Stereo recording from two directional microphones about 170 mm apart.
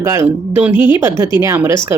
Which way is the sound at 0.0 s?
15° right (ahead or behind).